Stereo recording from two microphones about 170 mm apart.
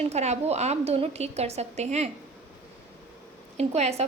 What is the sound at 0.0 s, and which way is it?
A woman's voice, 40° right (ahead or behind).